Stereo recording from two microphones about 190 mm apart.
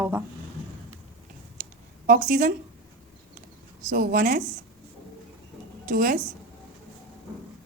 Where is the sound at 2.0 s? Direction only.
50° right (ahead or behind).